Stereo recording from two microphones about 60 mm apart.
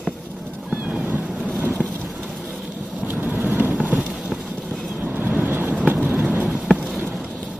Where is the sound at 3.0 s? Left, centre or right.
Right.